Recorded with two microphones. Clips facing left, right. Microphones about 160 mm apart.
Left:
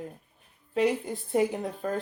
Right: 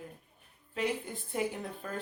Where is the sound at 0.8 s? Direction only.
40° left (ahead or behind).